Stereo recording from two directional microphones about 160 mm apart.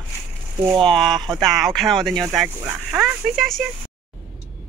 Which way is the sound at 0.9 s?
Centre (ahead or behind).